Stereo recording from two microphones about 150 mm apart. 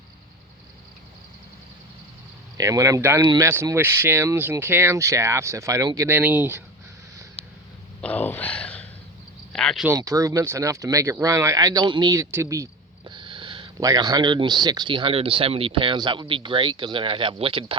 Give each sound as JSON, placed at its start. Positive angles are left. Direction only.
{"t": 2.6, "sound": "speech", "side_deg": -20}
{"t": 8.0, "sound": "a sound", "side_deg": 10}
{"t": 9.5, "sound": "speech", "side_deg": 5}
{"t": 9.8, "sound": "speech", "side_deg": -20}
{"t": 13.1, "sound": "a sound", "side_deg": -35}
{"t": 13.8, "sound": "speech", "side_deg": -25}